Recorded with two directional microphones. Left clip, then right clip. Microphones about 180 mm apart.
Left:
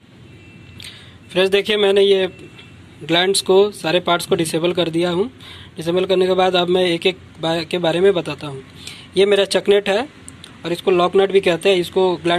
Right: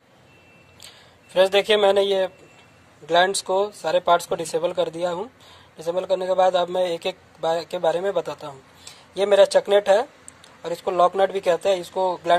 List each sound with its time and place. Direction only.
0.8 s a man's voice: 20° right (ahead or behind)